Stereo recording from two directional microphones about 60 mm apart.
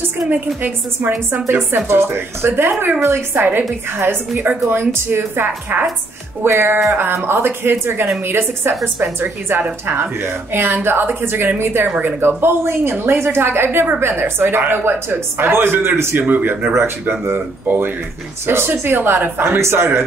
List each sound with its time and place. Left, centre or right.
0.6 s a woman's voice: right
16.3 s speech: right
16.7 s a woman's voice: right
19.4 s a man's voice: right